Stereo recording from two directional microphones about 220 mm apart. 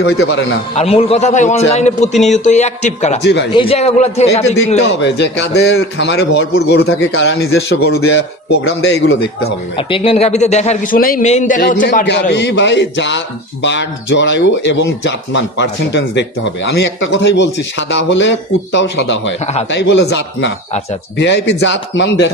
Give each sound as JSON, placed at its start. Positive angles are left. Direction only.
{"t": 0.7, "sound": "a man's voice", "side_deg": 25}
{"t": 3.2, "sound": "a man's voice", "side_deg": 50}
{"t": 3.5, "sound": "a man's voice", "side_deg": 25}
{"t": 5.0, "sound": "a man's voice", "side_deg": 50}
{"t": 6.8, "sound": "speech", "side_deg": 70}
{"t": 7.3, "sound": "a man's voice", "side_deg": 45}
{"t": 8.5, "sound": "a man's voice", "side_deg": 60}
{"t": 9.8, "sound": "a man's voice", "side_deg": 25}